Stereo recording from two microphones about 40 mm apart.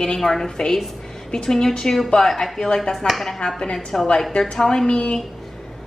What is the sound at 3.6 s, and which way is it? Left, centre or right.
A woman's voice, centre.